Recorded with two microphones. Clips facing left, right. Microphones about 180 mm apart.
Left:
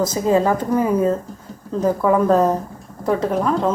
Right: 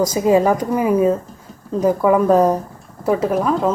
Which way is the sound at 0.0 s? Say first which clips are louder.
Right 3 dB; 10° right (ahead or behind).